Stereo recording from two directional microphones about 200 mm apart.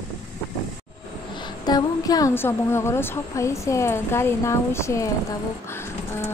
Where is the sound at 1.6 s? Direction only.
20° left (ahead or behind).